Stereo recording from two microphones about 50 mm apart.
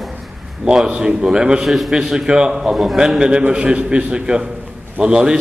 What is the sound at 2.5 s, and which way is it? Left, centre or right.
A man's voice, centre.